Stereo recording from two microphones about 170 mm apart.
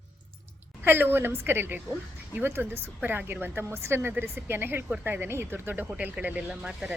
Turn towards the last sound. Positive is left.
turn(degrees=-5)  # may be behind; listen again after turning